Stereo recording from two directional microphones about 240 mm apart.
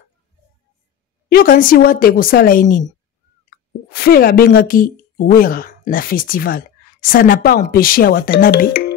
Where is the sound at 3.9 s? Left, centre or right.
Left.